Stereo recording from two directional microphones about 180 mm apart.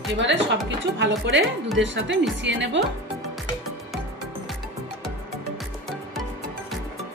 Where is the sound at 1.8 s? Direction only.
90° right.